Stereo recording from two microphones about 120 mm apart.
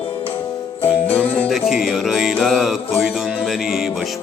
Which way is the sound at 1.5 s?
5° right (ahead or behind).